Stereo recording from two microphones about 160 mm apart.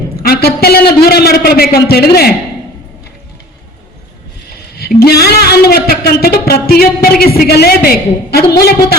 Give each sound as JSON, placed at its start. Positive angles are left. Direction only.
{"t": 0.2, "sound": "a man's voice", "side_deg": 75}
{"t": 4.4, "sound": "a man's voice", "side_deg": 80}